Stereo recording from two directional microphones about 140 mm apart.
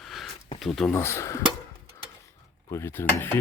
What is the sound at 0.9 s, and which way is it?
Speech, 20° left (ahead or behind).